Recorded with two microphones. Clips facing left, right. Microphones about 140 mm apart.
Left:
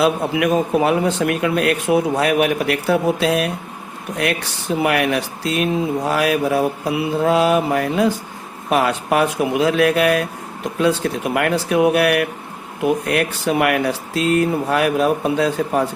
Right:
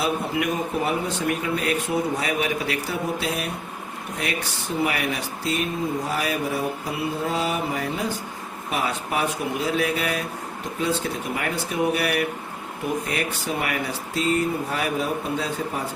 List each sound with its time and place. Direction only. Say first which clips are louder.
0.0 s speech: left 7 dB; 90° left
4.8 s speech: left 7 dB; 75° left (ahead or behind)